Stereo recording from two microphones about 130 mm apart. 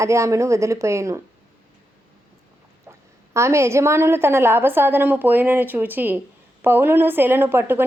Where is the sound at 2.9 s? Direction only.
20° right (ahead or behind).